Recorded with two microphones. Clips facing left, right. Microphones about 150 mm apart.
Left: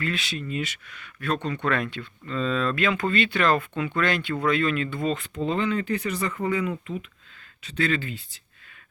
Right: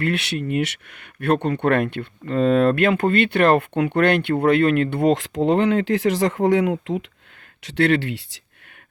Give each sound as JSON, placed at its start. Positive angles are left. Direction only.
{"t": 0.0, "sound": "speech", "side_deg": -65}